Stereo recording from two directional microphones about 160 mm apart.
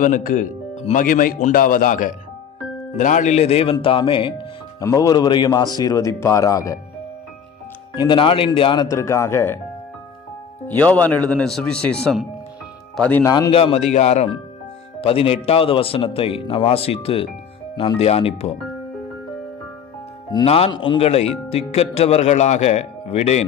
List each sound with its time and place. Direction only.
0.0 s speech: 55° left (ahead or behind); by 6.8 s 20° left (ahead or behind)
7.9 s speech: 30° left (ahead or behind)
8.8 s a man's voice: 20° left (ahead or behind)
10.7 s a man's voice: 10° left (ahead or behind)
13.2 s speech: 25° left (ahead or behind)
13.5 s speech: 35° left (ahead or behind)
20.4 s speech: 35° left (ahead or behind)